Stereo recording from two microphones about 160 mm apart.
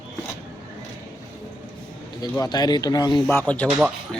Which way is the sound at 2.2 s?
25° left (ahead or behind).